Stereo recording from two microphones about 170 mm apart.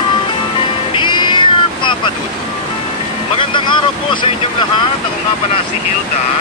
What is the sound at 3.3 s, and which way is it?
Vehicle, 30° left (ahead or behind).